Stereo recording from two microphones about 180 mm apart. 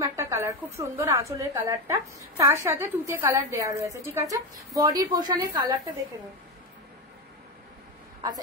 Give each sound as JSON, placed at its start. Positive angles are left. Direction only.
{"t": 0.0, "sound": "a woman's voice", "side_deg": -15}